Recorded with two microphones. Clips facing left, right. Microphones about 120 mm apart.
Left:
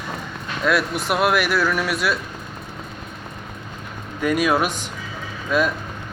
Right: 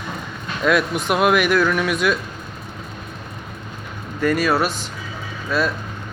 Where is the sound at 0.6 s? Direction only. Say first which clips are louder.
Right 2 dB; centre (ahead or behind).